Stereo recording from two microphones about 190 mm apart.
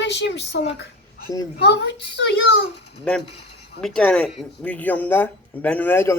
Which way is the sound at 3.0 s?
5° left (ahead or behind).